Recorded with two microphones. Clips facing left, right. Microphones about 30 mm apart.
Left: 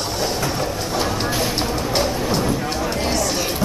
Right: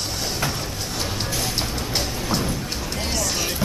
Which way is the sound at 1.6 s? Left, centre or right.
Centre.